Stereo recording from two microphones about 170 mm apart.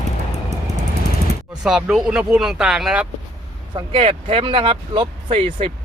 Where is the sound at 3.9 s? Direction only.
35° right (ahead or behind).